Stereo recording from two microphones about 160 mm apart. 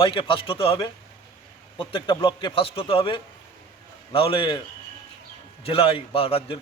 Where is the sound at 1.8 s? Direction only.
35° left (ahead or behind).